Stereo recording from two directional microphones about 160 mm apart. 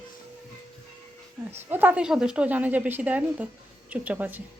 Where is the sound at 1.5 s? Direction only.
10° right (ahead or behind).